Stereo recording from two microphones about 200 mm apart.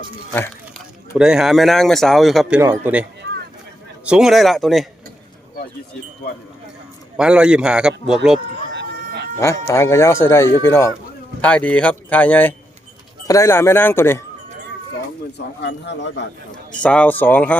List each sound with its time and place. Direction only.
1.1 s a man's voice: 5° right (ahead or behind)
2.6 s a man's voice: 10° right (ahead or behind)
7.2 s a man's voice: 5° right (ahead or behind)
8.7 s a sound: 60° right (ahead or behind)
9.4 s speech: 15° left (ahead or behind)
15.6 s speech: 60° left (ahead or behind)
16.8 s speech: 5° left (ahead or behind)